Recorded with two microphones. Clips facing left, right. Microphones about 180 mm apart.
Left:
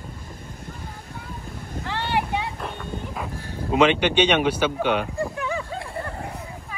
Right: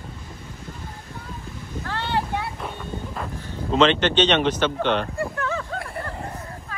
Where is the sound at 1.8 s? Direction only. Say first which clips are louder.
Left 1 dB; 15° left (ahead or behind).